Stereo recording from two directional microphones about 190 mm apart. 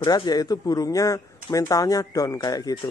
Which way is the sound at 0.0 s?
20° left (ahead or behind).